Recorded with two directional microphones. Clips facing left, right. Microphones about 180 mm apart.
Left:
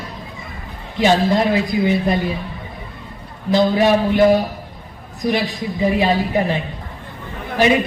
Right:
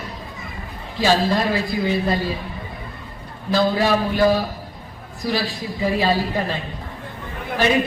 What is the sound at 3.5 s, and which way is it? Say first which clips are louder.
A man's voice: left 4 dB; 20° left (ahead or behind).